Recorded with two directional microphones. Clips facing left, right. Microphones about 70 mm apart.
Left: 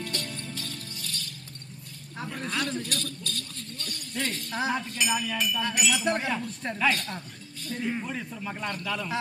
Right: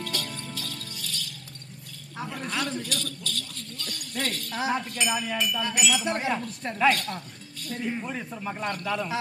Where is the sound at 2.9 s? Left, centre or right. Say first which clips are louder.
Right 1 dB; left.